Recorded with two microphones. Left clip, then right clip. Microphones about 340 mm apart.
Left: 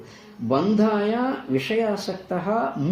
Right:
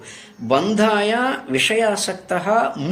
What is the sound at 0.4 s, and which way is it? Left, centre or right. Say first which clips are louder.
Speech: right 5 dB; right.